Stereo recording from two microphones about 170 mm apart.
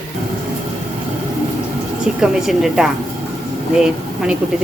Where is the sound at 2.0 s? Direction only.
5° right (ahead or behind).